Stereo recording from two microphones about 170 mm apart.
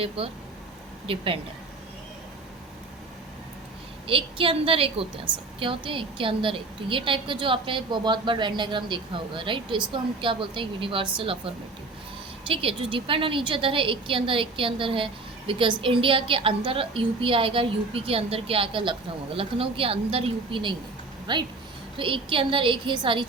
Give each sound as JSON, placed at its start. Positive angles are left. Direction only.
{"t": 0.2, "sound": "a woman's voice", "side_deg": -35}
{"t": 4.0, "sound": "a woman's voice", "side_deg": -30}